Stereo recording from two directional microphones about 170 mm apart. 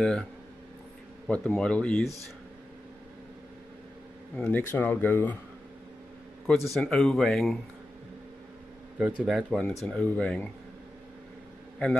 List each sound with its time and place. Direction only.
1.2 s speech: 5° left (ahead or behind)
4.4 s speech: 10° left (ahead or behind)
6.4 s speech: centre (ahead or behind)
8.9 s speech: 5° right (ahead or behind)